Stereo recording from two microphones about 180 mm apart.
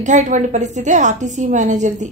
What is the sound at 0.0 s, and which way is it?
A woman's voice, 45° right (ahead or behind).